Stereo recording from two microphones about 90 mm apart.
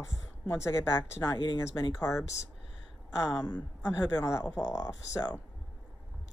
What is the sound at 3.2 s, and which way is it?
Speech, 45° left (ahead or behind).